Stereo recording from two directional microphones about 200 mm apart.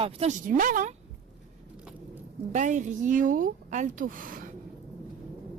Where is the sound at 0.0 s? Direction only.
35° right (ahead or behind).